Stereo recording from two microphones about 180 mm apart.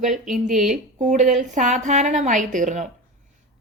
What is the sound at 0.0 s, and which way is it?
A woman's voice, 45° right (ahead or behind).